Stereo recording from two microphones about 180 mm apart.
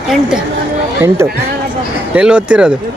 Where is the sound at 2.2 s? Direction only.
5° right (ahead or behind).